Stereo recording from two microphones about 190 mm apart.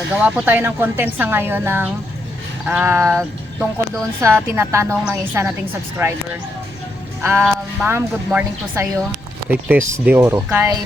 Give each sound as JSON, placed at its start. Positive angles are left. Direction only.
{"t": 0.2, "sound": "speech", "side_deg": -5}
{"t": 7.2, "sound": "music", "side_deg": -10}
{"t": 7.4, "sound": "speech", "side_deg": -5}